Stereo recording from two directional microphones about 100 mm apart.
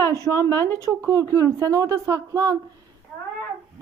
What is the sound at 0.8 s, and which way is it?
Speech, 30° right (ahead or behind).